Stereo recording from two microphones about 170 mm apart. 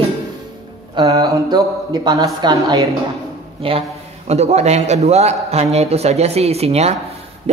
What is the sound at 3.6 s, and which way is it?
A man's voice, 30° right (ahead or behind).